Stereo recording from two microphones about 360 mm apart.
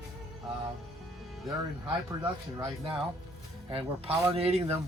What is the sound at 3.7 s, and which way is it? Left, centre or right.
Speech, centre.